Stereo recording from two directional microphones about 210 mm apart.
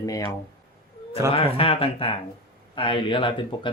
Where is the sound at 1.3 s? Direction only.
25° left (ahead or behind).